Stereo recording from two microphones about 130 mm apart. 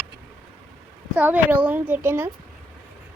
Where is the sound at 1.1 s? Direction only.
10° right (ahead or behind).